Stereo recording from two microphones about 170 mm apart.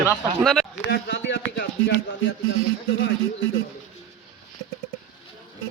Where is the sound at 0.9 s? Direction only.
80° left.